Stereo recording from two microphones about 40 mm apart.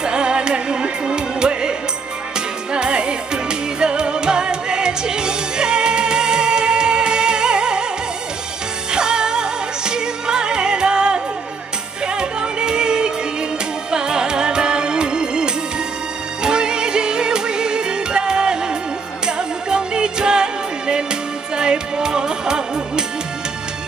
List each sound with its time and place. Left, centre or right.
0.0 s music: right
8.9 s music: centre